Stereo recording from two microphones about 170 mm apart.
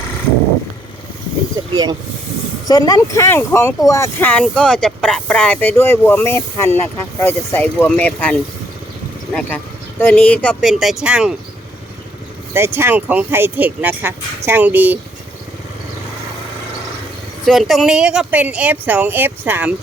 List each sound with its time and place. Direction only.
1.7 s speech: 25° right (ahead or behind)
2.6 s speech: 20° left (ahead or behind); by 11.3 s 5° right (ahead or behind)
12.5 s speech: 15° right (ahead or behind)
17.4 s speech: centre (ahead or behind)